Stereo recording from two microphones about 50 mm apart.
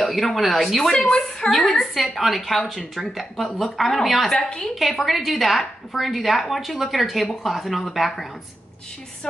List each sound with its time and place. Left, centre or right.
0.0 s a woman's voice: centre
0.9 s a woman's voice: left
1.5 s a woman's voice: centre
4.3 s a woman's voice: centre
4.7 s a woman's voice: centre